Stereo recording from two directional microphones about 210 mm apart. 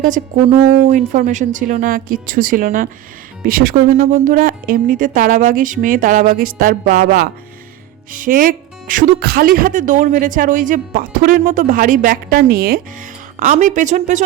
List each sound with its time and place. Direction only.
0.0 s speech: 35° right (ahead or behind)